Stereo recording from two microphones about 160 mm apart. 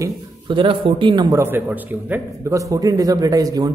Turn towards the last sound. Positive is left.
turn(degrees=-20)  # may be behind; listen again after turning